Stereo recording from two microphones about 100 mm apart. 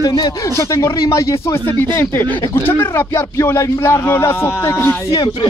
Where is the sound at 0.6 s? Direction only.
30° left (ahead or behind).